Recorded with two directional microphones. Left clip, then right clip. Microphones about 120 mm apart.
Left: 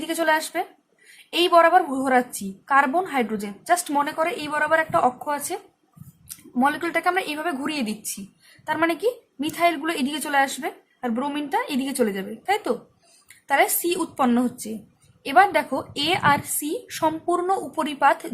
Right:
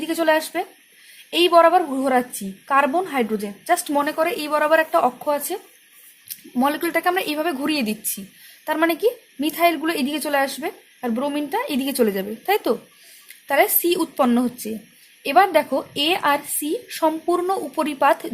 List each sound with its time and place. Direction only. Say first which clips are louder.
0.1 s a woman's voice: right 2 dB; 35° right (ahead or behind)
6.6 s a woman's voice: right 1 dB; 40° right (ahead or behind); by 17.8 s 25° right (ahead or behind)
17.8 s a woman's voice: right 1 dB; 35° right (ahead or behind)